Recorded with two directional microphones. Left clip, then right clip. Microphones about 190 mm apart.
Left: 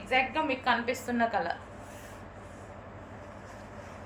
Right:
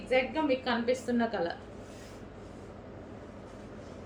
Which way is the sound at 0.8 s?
20° right (ahead or behind).